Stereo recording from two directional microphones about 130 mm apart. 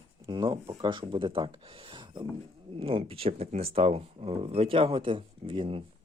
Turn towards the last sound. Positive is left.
turn(degrees=-40)  # may be behind; listen again after turning